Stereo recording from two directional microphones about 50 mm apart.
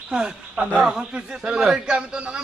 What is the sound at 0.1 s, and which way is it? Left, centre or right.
A man's voice, centre.